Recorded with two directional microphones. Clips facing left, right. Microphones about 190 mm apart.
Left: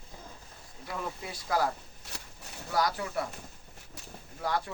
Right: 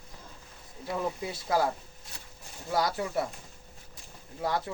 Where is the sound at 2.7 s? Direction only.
25° right (ahead or behind).